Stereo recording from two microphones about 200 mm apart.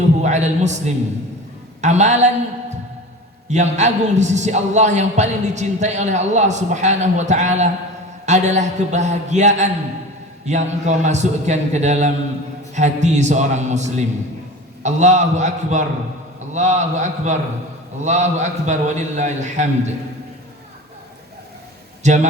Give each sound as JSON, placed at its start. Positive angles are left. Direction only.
{"t": 0.2, "sound": "a man's voice", "side_deg": -35}
{"t": 3.5, "sound": "a man's voice", "side_deg": -35}
{"t": 22.0, "sound": "a man's voice", "side_deg": -35}